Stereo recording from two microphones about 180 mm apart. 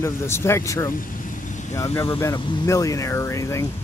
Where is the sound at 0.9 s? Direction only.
50° left (ahead or behind).